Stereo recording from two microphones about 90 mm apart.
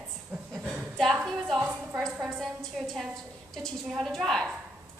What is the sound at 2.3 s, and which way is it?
A woman's voice, centre (ahead or behind).